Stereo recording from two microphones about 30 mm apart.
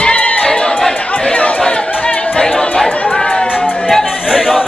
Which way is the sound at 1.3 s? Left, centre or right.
Left.